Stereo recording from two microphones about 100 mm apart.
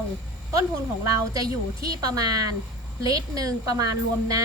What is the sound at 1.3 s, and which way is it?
A woman's voice, 40° right (ahead or behind).